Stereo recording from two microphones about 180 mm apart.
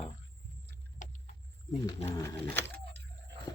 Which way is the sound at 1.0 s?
45° left (ahead or behind).